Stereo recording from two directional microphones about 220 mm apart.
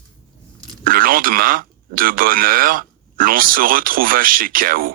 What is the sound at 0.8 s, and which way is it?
Speech, 40° right (ahead or behind).